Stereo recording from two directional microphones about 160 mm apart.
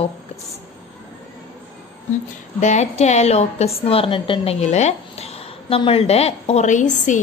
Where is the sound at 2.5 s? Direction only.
45° left (ahead or behind).